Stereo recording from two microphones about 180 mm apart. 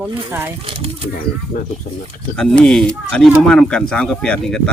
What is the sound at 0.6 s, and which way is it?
Speech, 30° right (ahead or behind).